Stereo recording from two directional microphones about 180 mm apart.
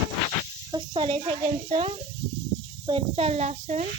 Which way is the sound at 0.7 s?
25° right (ahead or behind).